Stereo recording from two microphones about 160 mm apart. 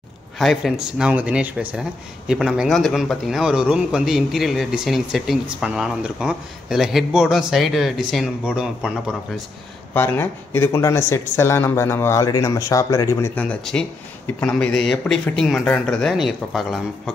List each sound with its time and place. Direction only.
0.4 s speech: centre (ahead or behind)
9.9 s speech: 15° left (ahead or behind)